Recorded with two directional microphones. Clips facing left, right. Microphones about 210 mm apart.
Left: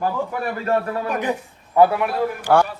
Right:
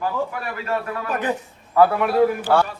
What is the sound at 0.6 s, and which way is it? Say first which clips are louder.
Speech: left 4 dB; 35° left (ahead or behind).